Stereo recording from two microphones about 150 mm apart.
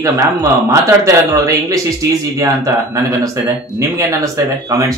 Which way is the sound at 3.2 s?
20° right (ahead or behind).